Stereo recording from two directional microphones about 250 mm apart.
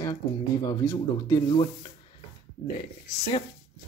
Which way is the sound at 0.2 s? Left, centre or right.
Centre.